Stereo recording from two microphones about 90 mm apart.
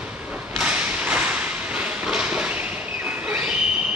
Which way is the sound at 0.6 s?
10° right (ahead or behind).